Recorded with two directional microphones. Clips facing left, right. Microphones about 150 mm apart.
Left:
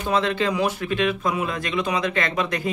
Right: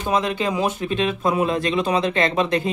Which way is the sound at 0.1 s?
15° right (ahead or behind).